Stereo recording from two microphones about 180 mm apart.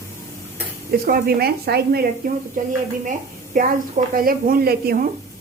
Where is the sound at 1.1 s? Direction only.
60° right (ahead or behind).